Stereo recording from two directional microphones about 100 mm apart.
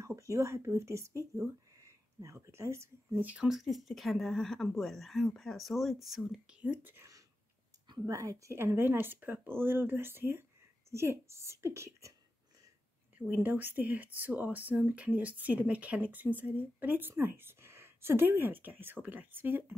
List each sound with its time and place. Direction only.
0.0 s speech: 30° right (ahead or behind)
3.3 s speech: 10° right (ahead or behind)
8.1 s speech: 30° right (ahead or behind)
13.3 s speech: 20° right (ahead or behind)